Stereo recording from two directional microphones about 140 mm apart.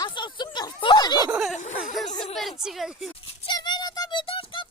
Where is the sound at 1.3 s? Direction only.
Centre (ahead or behind).